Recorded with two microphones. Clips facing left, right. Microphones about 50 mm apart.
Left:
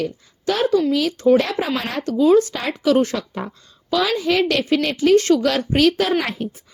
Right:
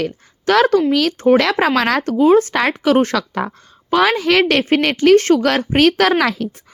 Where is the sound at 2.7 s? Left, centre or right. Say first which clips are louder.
Even; right.